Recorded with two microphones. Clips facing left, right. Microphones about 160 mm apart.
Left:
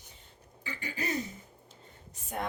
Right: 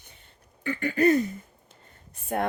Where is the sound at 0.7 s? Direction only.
60° right (ahead or behind).